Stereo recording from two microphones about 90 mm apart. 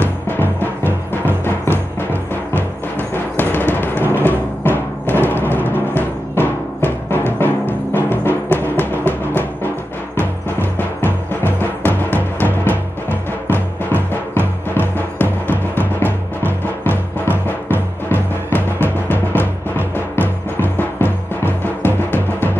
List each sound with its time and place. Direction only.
0.3 s music: 25° left (ahead or behind)
10.1 s timpani: 25° left (ahead or behind)